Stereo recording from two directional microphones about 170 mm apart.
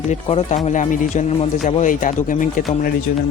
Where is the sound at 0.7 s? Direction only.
45° left (ahead or behind).